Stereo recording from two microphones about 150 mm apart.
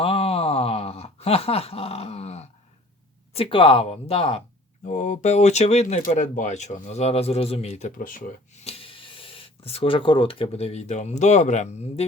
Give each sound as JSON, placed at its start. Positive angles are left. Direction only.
{"t": 0.0, "sound": "groan", "side_deg": 40}
{"t": 3.3, "sound": "speech", "side_deg": 35}
{"t": 4.9, "sound": "speech", "side_deg": 55}
{"t": 6.0, "sound": "speech", "side_deg": 60}
{"t": 8.6, "sound": "speech", "side_deg": 40}